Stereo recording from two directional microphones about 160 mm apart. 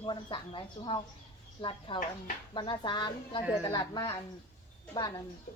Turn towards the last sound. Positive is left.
turn(degrees=25)  # may be behind; listen again after turning